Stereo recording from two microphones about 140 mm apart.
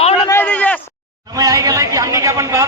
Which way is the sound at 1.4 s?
25° right (ahead or behind).